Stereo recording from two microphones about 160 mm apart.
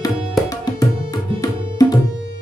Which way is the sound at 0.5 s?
20° left (ahead or behind).